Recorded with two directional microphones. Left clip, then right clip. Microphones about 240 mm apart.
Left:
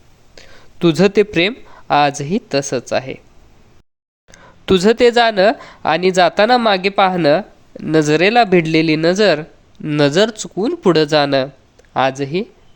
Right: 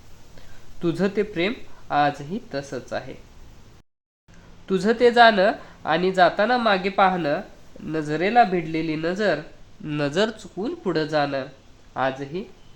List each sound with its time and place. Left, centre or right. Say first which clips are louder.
0.8 s speech: left 11 dB; left
4.3 s speech: left 11 dB; left
9.8 s speech: left 10 dB; left